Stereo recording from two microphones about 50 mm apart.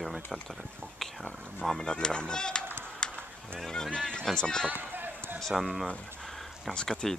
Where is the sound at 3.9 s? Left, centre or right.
Centre.